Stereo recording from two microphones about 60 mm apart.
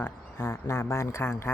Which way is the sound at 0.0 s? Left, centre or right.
Left.